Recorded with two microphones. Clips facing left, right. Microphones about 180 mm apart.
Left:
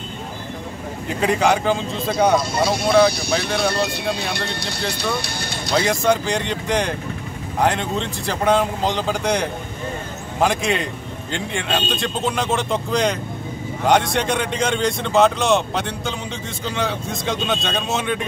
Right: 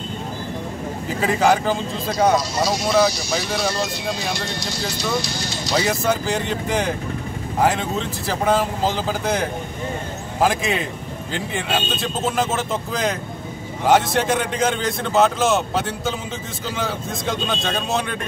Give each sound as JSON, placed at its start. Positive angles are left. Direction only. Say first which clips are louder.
{"t": 1.0, "sound": "speech", "louder": "even", "side_deg": 0}
{"t": 2.3, "sound": "speech", "louder": "left 2 dB", "side_deg": 55}
{"t": 5.9, "sound": "speech", "louder": "left 2 dB", "side_deg": -5}